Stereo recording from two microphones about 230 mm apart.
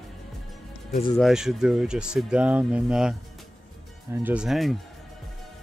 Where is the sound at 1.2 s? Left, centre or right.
Centre.